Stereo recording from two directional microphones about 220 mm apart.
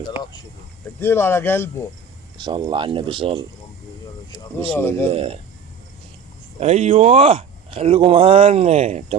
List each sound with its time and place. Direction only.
0.9 s speech: 10° left (ahead or behind)
2.4 s speech: 20° right (ahead or behind)
4.7 s speech: 10° left (ahead or behind)
5.0 s speech: 25° right (ahead or behind)
6.6 s speech: 30° right (ahead or behind)